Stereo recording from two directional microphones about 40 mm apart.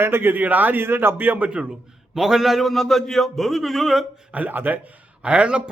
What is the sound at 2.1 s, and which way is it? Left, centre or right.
A man's voice, centre.